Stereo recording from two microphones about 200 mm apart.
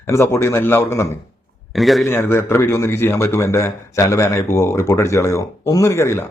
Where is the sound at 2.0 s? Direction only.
10° left (ahead or behind).